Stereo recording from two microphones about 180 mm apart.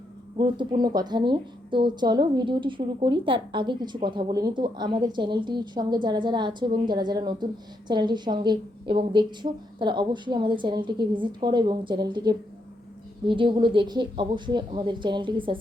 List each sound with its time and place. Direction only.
0.3 s a woman's voice: 25° right (ahead or behind)